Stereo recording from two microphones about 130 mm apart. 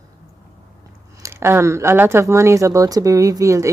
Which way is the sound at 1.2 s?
20° right (ahead or behind).